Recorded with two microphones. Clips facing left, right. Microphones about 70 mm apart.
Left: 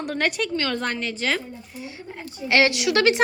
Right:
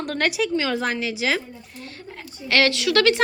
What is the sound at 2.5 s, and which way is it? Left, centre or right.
Speech, centre.